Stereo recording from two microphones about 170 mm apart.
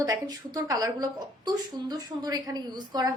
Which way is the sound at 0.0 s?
20° right (ahead or behind).